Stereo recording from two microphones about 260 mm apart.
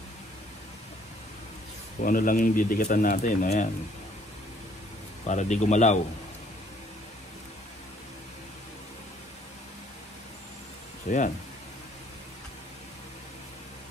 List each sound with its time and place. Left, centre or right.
2.0 s speech: left
5.2 s speech: left
11.1 s speech: left